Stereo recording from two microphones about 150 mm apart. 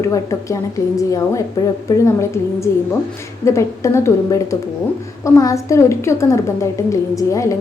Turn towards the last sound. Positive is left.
turn(degrees=20)  # may be behind; listen again after turning